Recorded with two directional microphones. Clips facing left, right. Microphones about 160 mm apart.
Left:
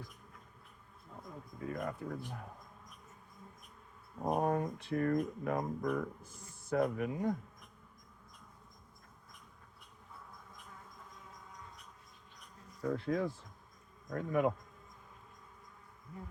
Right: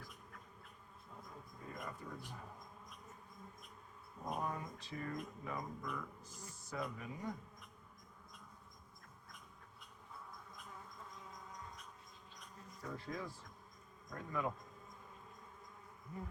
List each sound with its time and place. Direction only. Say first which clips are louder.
1.7 s speech: left 9 dB; 60° left (ahead or behind)
4.2 s speech: left 10 dB; 50° left (ahead or behind)
12.9 s speech: left 11 dB; 65° left (ahead or behind)